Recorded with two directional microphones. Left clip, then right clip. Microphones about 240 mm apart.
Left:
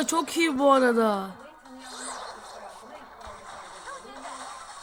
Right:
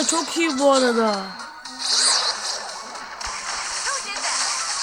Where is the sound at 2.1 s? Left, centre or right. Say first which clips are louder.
Right 16 dB; right.